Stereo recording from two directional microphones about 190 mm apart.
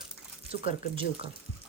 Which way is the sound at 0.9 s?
30° right (ahead or behind).